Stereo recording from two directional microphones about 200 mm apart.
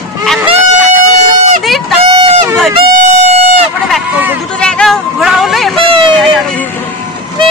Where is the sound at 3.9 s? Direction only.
10° right (ahead or behind).